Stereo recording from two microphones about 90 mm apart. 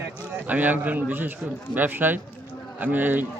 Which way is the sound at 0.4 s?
20° right (ahead or behind).